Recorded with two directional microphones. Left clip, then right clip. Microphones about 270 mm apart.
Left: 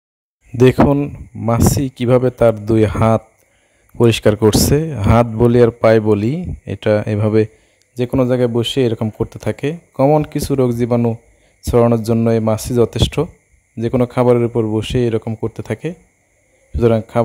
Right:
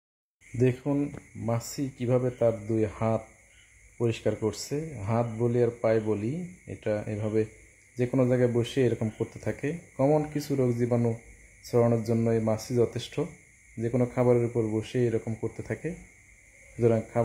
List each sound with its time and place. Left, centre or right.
0.6 s speech: left